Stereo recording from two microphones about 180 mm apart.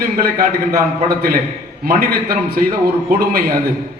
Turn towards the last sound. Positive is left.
turn(degrees=-55)  # may be behind; listen again after turning